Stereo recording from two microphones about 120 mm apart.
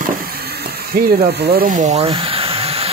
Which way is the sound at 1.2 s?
80° right.